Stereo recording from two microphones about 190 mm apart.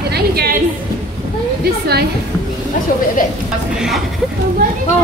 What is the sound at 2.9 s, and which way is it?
Speech, 45° left (ahead or behind).